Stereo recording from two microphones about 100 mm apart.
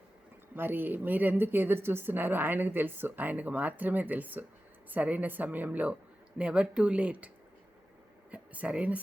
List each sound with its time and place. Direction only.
0.5 s a woman's voice: 20° right (ahead or behind)
8.3 s speech: 15° right (ahead or behind)